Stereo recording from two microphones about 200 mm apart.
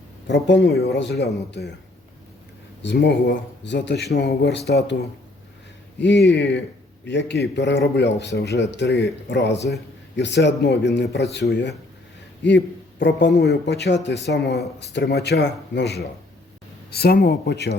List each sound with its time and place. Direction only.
0.3 s speech: 60° left (ahead or behind)
2.8 s speech: 60° left (ahead or behind)
6.0 s speech: 60° left (ahead or behind)